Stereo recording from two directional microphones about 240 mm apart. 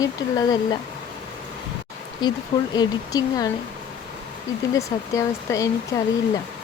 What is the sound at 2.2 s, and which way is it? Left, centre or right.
Speech, centre.